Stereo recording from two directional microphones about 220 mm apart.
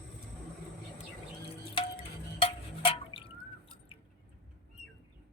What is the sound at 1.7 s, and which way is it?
Drip, 25° left (ahead or behind).